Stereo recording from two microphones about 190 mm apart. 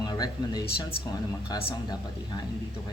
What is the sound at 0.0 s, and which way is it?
Speech, 20° left (ahead or behind).